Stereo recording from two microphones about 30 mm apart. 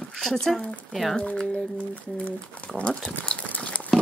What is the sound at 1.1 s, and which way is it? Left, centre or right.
Speech, left.